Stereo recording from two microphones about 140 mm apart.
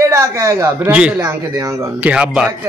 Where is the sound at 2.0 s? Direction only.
10° right (ahead or behind).